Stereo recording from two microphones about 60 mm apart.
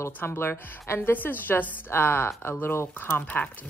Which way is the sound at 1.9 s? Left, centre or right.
Left.